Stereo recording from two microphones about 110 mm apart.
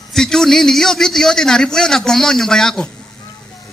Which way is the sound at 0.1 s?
5° left (ahead or behind).